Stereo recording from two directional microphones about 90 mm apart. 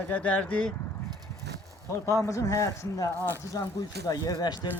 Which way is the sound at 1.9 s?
35° left (ahead or behind).